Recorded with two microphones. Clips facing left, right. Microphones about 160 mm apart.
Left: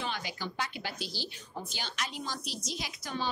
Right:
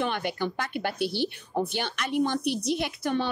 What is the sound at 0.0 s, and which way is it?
Speech, 60° right (ahead or behind).